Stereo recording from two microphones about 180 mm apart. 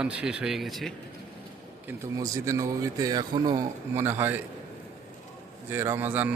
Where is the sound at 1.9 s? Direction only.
20° right (ahead or behind).